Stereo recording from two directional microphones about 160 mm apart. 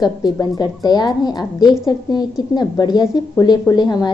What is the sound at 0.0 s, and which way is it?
A woman's voice, 25° left (ahead or behind).